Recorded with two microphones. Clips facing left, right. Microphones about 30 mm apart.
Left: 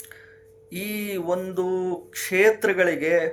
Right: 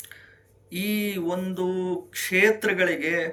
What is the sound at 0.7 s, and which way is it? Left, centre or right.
Speech, right.